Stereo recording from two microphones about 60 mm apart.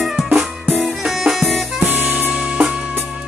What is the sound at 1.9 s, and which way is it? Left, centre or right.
Music, right.